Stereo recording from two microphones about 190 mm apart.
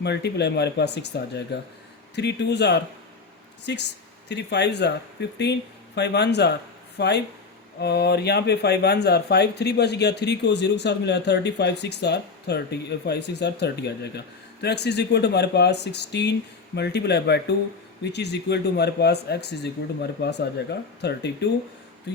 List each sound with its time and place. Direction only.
0.0 s speech: 60° left (ahead or behind)